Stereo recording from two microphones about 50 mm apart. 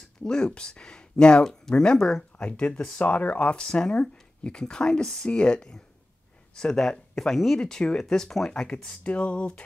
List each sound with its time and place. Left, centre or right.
0.2 s speech: centre
2.3 s speech: left; by 8.6 s centre
8.8 s speech: left